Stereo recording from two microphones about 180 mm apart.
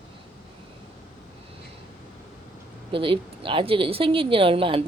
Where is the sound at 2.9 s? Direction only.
30° right (ahead or behind).